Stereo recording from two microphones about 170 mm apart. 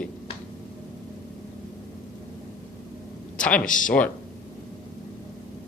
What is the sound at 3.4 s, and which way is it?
Speech, 5° left (ahead or behind).